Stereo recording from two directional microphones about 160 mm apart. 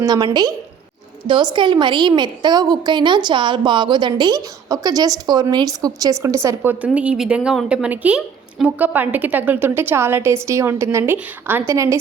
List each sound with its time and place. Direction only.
0.0 s a woman's voice: 25° right (ahead or behind)